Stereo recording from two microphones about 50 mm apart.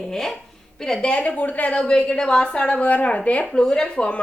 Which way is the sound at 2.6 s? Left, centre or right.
Left.